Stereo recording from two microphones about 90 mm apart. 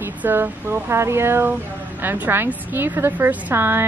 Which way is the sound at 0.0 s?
20° right (ahead or behind).